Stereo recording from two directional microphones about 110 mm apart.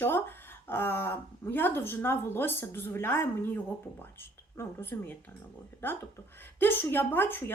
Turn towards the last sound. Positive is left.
turn(degrees=20)  # may be behind; listen again after turning